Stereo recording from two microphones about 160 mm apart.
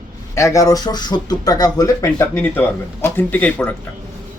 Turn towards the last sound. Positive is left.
turn(degrees=10)  # may be behind; listen again after turning